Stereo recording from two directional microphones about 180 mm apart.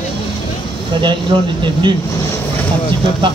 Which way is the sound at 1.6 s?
25° right (ahead or behind).